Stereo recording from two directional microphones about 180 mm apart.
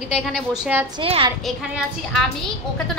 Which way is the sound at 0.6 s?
10° right (ahead or behind).